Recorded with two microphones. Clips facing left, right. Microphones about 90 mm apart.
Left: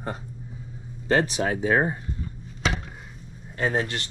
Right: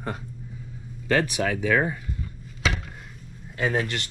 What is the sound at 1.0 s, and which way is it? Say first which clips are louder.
Speech: left 1 dB; 25° left (ahead or behind).